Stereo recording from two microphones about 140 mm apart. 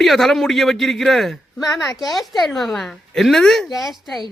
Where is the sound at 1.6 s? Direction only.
25° left (ahead or behind).